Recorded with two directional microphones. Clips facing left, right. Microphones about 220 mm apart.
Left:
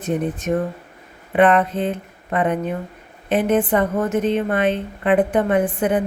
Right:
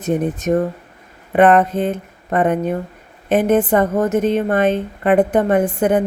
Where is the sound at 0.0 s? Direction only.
40° right (ahead or behind).